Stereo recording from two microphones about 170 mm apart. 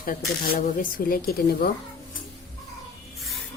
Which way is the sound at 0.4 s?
55° left (ahead or behind).